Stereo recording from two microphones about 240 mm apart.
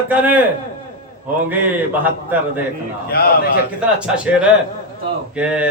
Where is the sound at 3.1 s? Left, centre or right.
Left.